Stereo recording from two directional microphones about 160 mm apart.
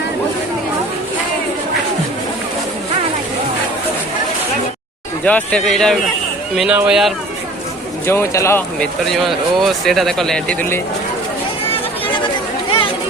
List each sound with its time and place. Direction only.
5.2 s speech: 10° left (ahead or behind)
8.0 s speech: 15° left (ahead or behind)
9.1 s speech: centre (ahead or behind)
11.7 s chatter: 30° left (ahead or behind)